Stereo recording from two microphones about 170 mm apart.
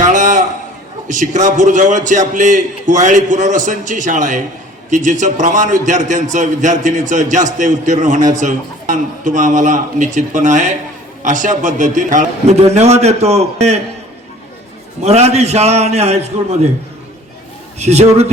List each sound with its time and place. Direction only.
0.0 s a sound: 50° right (ahead or behind)
1.0 s a man's voice: 45° right (ahead or behind)
15.0 s a man's voice: 40° right (ahead or behind)
17.7 s a man's voice: 40° right (ahead or behind)